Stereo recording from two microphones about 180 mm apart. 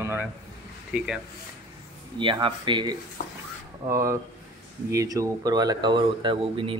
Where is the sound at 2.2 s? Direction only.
25° right (ahead or behind).